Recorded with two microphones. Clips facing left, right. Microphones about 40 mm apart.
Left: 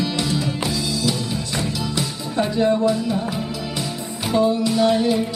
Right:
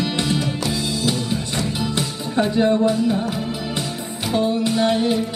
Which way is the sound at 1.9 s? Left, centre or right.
Right.